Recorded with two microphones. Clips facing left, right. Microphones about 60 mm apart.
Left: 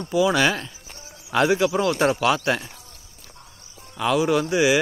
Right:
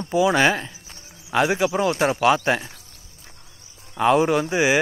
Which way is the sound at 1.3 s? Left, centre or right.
Centre.